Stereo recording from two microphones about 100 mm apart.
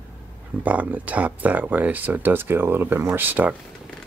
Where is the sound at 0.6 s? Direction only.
15° right (ahead or behind).